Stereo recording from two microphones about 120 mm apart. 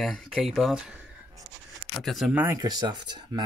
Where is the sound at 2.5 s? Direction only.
35° right (ahead or behind).